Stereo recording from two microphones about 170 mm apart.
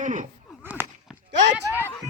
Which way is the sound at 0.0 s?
50° right (ahead or behind).